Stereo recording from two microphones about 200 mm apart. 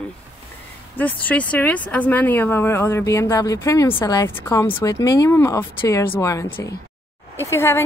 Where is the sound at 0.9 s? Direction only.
10° left (ahead or behind).